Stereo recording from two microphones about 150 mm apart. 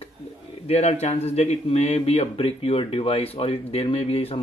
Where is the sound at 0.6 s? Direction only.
45° left (ahead or behind).